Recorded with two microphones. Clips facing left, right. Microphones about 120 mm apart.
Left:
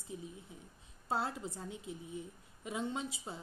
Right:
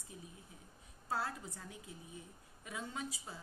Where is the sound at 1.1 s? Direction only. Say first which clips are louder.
Left 3 dB; 25° left (ahead or behind).